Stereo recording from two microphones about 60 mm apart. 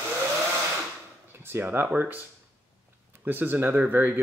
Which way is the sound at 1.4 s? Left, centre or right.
Right.